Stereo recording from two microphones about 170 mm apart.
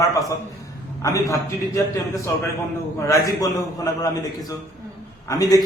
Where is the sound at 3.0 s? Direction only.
20° left (ahead or behind).